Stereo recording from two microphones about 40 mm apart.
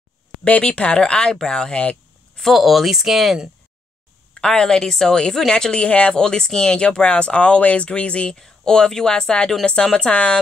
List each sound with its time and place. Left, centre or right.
0.5 s speech: left
2.4 s speech: centre
4.3 s a woman's voice: centre
6.1 s speech: centre
8.4 s a woman's voice: centre; by 10.4 s left